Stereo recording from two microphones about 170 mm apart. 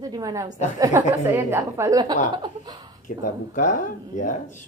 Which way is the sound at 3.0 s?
50° left (ahead or behind).